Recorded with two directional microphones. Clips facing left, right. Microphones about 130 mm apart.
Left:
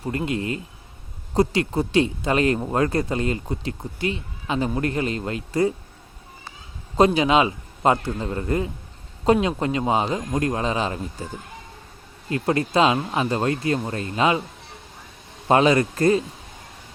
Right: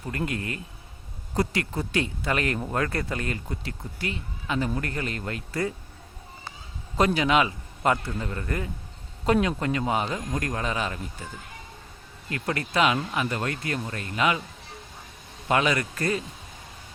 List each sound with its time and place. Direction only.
0.0 s speech: 25° left (ahead or behind)
6.9 s speech: 25° left (ahead or behind)
12.3 s speech: 25° left (ahead or behind)
15.4 s speech: 30° left (ahead or behind)